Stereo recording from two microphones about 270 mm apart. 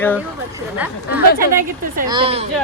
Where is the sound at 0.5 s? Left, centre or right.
Centre.